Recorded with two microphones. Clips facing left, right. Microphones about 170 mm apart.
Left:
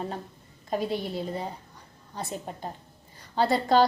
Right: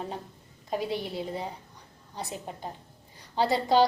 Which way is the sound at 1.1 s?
15° right (ahead or behind).